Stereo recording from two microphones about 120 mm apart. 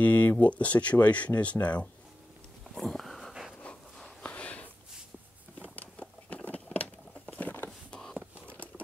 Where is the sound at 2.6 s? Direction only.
5° left (ahead or behind).